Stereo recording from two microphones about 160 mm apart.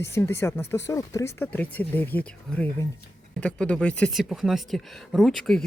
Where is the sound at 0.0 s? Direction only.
15° left (ahead or behind).